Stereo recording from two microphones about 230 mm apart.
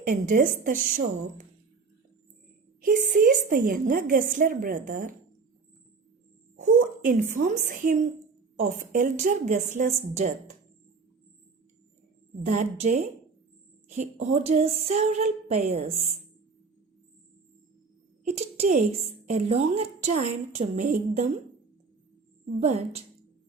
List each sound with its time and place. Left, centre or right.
0.0 s a woman's voice: right
2.8 s a woman's voice: right
6.6 s a woman's voice: right
12.5 s a woman's voice: right
18.3 s a woman's voice: right